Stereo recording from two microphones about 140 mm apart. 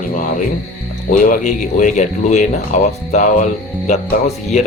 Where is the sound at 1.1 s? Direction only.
80° left.